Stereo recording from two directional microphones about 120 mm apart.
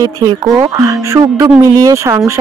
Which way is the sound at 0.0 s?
30° right (ahead or behind).